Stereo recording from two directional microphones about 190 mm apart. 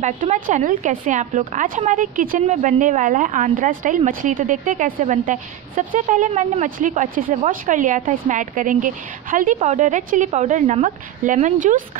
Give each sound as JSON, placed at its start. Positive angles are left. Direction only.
{"t": 0.0, "sound": "speech", "side_deg": -40}